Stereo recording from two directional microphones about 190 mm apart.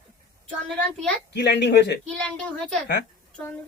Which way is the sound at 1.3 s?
60° left (ahead or behind).